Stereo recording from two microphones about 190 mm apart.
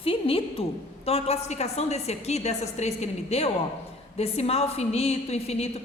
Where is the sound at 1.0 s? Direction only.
35° left (ahead or behind).